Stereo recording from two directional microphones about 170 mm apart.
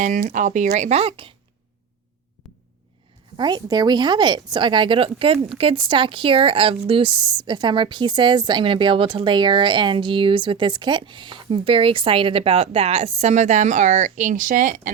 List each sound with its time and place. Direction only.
0.0 s speech: 50° right (ahead or behind); by 1.3 s 30° right (ahead or behind)
3.3 s speech: 25° right (ahead or behind); by 14.9 s 50° right (ahead or behind)